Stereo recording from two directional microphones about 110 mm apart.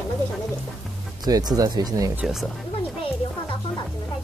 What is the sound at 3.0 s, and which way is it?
Music, 50° left (ahead or behind).